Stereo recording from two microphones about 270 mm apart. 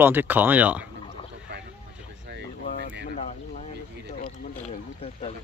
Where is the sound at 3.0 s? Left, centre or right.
Left.